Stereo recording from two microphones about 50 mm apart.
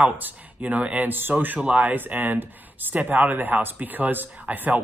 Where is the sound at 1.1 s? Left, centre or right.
Right.